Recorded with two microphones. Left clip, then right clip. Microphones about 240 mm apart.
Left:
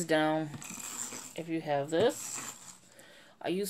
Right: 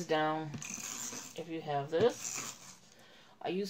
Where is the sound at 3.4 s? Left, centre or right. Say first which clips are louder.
Left 3 dB; left.